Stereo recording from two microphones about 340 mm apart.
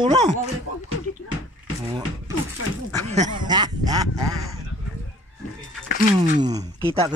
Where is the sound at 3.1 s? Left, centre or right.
Centre.